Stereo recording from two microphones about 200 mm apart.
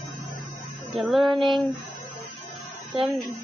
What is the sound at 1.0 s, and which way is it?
Music, centre (ahead or behind).